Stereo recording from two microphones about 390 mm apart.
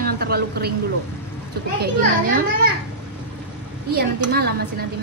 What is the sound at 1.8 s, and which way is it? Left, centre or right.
Speech, right.